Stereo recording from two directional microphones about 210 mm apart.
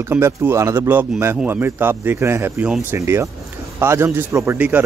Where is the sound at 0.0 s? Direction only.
10° right (ahead or behind).